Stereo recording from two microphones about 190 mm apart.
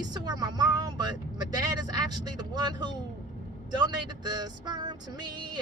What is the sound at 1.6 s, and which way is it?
Music, 20° right (ahead or behind).